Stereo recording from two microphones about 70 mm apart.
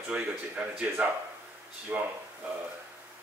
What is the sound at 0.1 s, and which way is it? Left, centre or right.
A man's voice, right.